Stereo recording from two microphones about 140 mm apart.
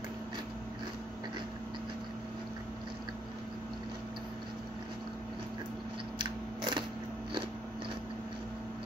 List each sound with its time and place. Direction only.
6.1 s scissors: 30° right (ahead or behind)